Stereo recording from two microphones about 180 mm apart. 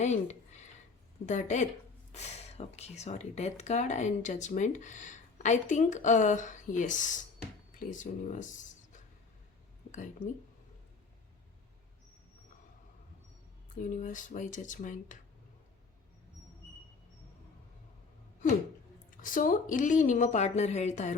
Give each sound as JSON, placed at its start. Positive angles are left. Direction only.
{"t": 0.0, "sound": "speech", "side_deg": 40}
{"t": 13.9, "sound": "speech", "side_deg": 45}
{"t": 19.1, "sound": "speech", "side_deg": 50}